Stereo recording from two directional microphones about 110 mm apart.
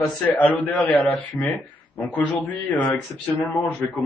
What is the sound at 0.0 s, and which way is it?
Speech, 15° left (ahead or behind).